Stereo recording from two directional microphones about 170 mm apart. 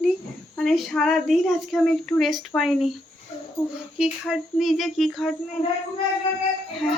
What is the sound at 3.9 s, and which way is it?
Speech, 5° right (ahead or behind).